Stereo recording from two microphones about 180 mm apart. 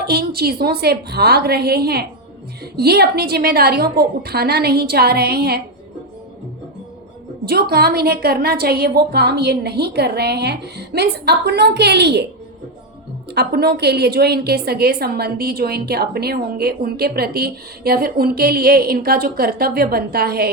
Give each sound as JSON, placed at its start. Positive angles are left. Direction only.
{"t": 0.0, "sound": "a woman's voice", "side_deg": -60}
{"t": 7.4, "sound": "a woman's voice", "side_deg": -60}
{"t": 13.3, "sound": "a woman's voice", "side_deg": -65}